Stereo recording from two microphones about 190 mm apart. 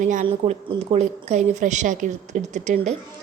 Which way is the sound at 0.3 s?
30° right (ahead or behind).